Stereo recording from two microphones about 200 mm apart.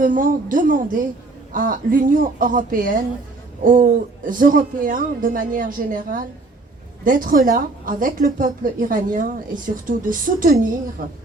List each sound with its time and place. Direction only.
0.0 s speech: 45° right (ahead or behind)